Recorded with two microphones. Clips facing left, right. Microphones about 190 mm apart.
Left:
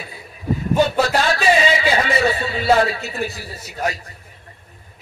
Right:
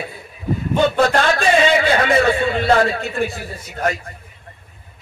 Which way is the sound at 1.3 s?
55° right (ahead or behind).